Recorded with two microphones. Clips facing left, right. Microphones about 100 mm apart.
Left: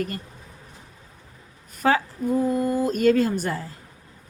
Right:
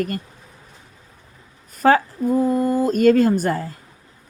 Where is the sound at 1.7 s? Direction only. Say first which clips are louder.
Right 6 dB; 45° right (ahead or behind).